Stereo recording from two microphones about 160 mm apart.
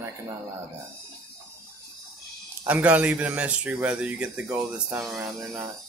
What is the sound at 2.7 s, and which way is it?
Speech, 10° right (ahead or behind).